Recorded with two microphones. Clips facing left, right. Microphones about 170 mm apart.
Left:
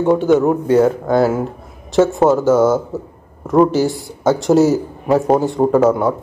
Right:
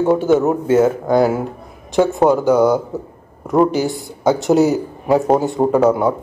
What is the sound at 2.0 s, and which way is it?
Speech, centre (ahead or behind).